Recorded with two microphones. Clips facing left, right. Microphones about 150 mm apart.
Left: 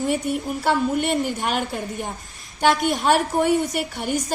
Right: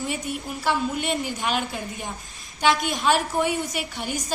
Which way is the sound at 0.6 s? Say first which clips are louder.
Left 3 dB; 55° left (ahead or behind).